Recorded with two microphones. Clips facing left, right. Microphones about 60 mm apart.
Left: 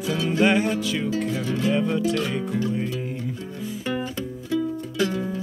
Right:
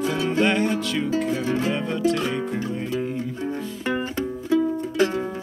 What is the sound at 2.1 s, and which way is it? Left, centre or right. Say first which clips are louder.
Speech: even; right.